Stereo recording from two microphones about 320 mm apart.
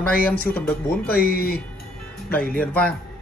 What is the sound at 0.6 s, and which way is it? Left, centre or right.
Speech, left.